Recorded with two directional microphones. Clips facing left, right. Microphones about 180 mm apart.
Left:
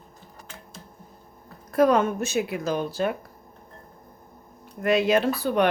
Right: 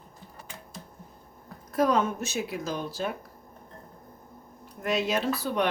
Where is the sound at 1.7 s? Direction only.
60° left (ahead or behind).